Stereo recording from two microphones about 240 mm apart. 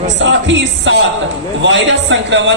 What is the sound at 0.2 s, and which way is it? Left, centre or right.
A man's voice, right.